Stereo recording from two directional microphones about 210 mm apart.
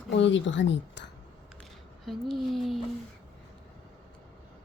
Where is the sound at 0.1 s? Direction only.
60° left (ahead or behind).